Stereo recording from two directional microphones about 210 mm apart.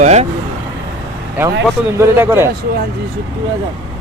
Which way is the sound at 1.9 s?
10° right (ahead or behind).